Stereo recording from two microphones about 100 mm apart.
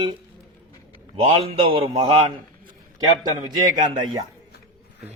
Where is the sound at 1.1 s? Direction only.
75° right (ahead or behind).